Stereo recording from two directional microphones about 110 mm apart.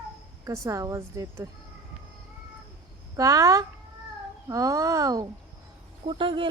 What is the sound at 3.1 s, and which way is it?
A woman's voice, 30° right (ahead or behind).